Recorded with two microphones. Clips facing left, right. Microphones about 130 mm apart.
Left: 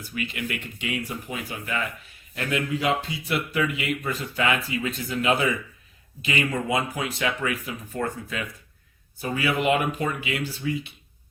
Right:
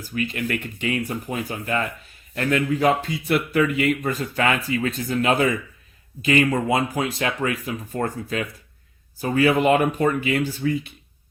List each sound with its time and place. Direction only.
0.0 s speech: 40° right (ahead or behind)